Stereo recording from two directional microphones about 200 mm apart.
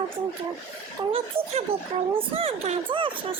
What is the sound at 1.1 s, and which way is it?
Speech, 30° right (ahead or behind).